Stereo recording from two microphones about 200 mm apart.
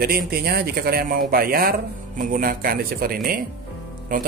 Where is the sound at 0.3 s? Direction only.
50° right (ahead or behind).